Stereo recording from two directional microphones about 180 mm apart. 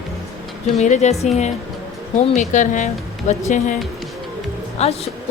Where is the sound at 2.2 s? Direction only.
40° left (ahead or behind).